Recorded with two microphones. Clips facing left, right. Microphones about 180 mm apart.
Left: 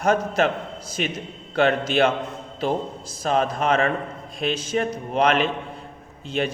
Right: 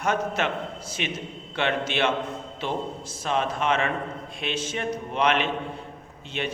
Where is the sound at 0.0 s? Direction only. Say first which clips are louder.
Left 5 dB; 40° left (ahead or behind).